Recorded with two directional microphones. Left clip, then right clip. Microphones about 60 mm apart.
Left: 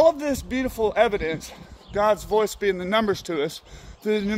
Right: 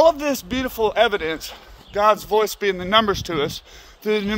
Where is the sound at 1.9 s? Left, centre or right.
Centre.